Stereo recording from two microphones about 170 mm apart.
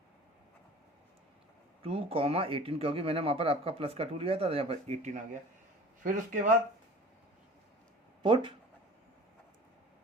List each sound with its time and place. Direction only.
1.8 s speech: 35° right (ahead or behind); by 6.5 s 50° right (ahead or behind)
8.2 s speech: 30° right (ahead or behind)